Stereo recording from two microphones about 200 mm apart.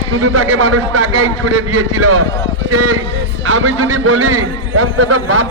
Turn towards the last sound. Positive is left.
turn(degrees=-85)